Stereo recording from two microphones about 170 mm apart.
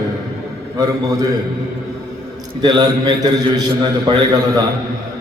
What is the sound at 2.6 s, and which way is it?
A man's voice, 25° right (ahead or behind).